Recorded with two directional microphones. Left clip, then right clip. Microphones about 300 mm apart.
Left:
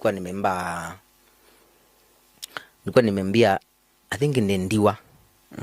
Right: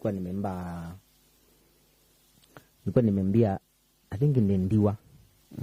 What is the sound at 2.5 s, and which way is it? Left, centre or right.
Speech, centre.